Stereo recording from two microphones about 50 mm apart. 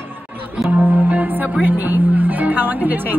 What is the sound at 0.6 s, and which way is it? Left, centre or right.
Music, centre.